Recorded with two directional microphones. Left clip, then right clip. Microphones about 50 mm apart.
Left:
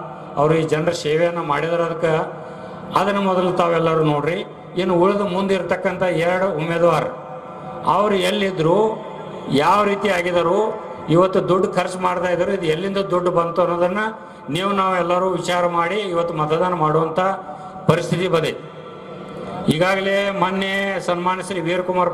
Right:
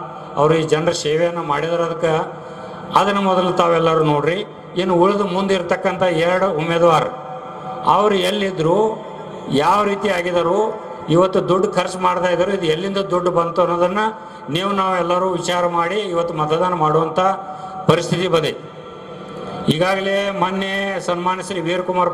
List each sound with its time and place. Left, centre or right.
0.4 s a man's voice: right
19.6 s a man's voice: right